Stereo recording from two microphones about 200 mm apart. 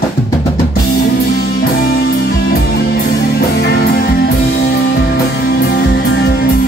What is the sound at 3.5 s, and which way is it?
Music, 50° left (ahead or behind).